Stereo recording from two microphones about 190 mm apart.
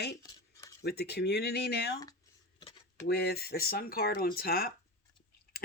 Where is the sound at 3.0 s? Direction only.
55° left (ahead or behind).